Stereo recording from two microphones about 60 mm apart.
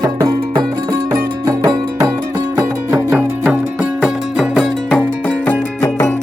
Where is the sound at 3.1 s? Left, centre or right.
Right.